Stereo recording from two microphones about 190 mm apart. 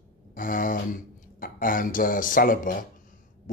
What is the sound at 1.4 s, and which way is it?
Speech, 45° left (ahead or behind).